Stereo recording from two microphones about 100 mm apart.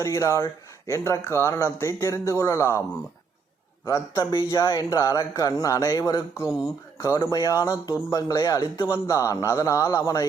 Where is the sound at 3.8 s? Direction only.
30° left (ahead or behind).